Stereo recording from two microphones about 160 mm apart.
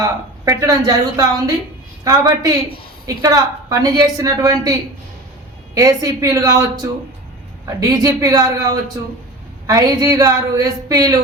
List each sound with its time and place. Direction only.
0.0 s a woman's voice: 20° right (ahead or behind)